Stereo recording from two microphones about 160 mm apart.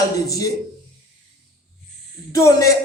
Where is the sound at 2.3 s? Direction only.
20° left (ahead or behind).